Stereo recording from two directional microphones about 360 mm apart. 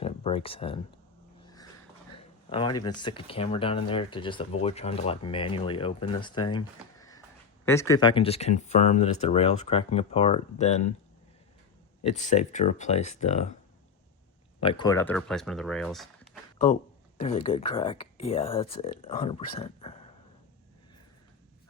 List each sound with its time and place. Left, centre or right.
0.0 s speech: centre
2.5 s speech: centre
7.6 s speech: centre
12.0 s speech: centre
14.6 s speech: centre
17.2 s speech: left